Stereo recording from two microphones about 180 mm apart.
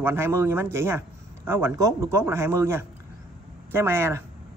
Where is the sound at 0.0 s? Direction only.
15° right (ahead or behind).